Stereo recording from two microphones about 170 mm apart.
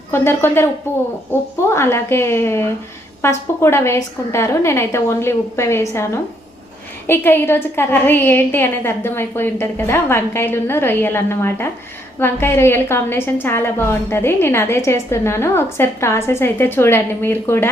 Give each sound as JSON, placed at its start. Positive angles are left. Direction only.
{"t": 0.1, "sound": "a woman's voice", "side_deg": 15}
{"t": 7.1, "sound": "a woman's voice", "side_deg": 15}